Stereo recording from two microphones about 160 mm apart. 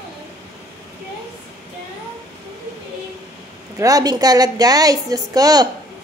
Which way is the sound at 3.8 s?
20° right (ahead or behind).